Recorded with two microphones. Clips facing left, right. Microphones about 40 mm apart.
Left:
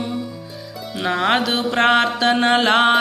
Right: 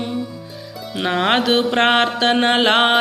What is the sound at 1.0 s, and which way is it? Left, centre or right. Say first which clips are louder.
Music: right 1 dB; right.